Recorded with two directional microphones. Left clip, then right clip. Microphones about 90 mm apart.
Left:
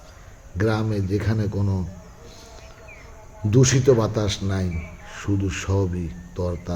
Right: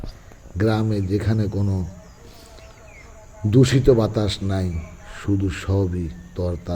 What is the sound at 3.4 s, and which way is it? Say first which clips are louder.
Speech: right 2 dB; 45° right (ahead or behind).